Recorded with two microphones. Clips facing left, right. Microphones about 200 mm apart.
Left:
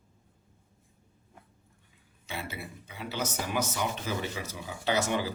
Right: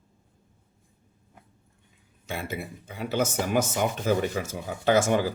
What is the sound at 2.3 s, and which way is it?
Speech, 50° right (ahead or behind).